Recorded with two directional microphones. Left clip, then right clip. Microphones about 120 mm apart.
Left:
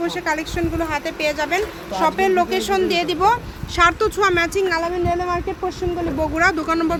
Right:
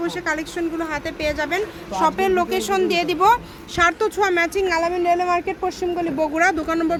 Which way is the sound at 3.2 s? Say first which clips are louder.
Right 4 dB; 25° right (ahead or behind).